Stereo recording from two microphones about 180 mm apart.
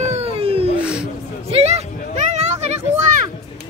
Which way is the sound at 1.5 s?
35° right (ahead or behind).